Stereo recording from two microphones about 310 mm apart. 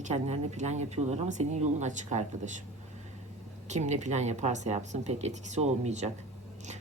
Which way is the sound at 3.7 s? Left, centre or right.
Right.